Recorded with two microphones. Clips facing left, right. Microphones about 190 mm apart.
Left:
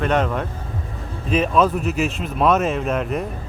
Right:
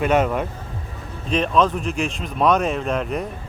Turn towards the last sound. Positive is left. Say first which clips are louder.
# left 1 dB
turn(degrees=0)  # may be behind; listen again after turning